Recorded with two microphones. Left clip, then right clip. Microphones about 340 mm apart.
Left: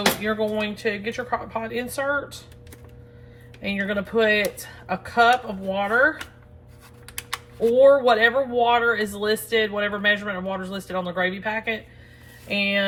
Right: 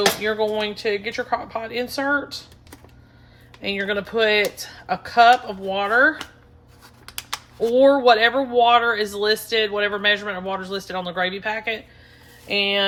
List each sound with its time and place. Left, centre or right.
0.3 s speech: right
3.6 s speech: right
7.7 s speech: right